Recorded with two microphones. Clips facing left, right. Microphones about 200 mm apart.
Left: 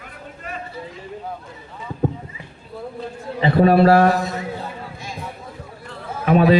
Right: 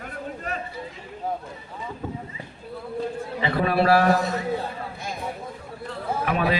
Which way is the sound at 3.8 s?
45° left (ahead or behind).